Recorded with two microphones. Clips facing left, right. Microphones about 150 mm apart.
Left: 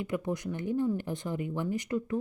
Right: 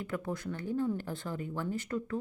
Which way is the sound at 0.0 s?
15° left (ahead or behind).